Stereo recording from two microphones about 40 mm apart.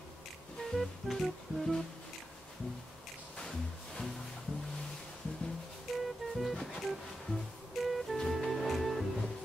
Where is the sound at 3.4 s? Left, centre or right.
Centre.